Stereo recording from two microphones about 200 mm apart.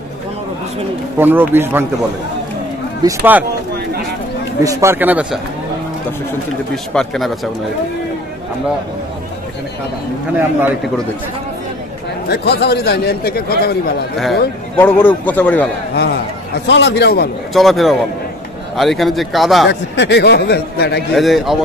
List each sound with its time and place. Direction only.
1.1 s speech: 10° right (ahead or behind)
3.0 s speech: 10° right (ahead or behind)
4.6 s speech: 15° right (ahead or behind)
6.7 s speech: centre (ahead or behind)
12.3 s speech: 55° left (ahead or behind)
14.8 s a man's voice: 10° left (ahead or behind)
15.9 s a man's voice: 50° left (ahead or behind)
17.6 s speech: centre (ahead or behind)
19.7 s a man's voice: 60° left (ahead or behind)
21.1 s speech: centre (ahead or behind)